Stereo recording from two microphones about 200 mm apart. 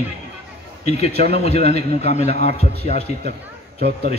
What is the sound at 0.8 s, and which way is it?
A man's voice, 30° left (ahead or behind).